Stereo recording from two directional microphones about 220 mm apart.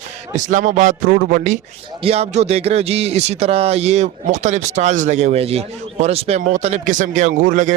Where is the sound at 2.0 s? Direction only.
30° right (ahead or behind).